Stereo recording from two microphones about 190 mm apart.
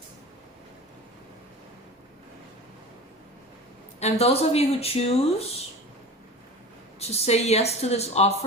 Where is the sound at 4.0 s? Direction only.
35° left (ahead or behind).